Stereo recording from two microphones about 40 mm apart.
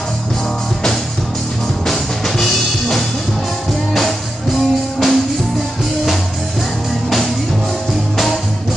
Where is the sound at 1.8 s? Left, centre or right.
Centre.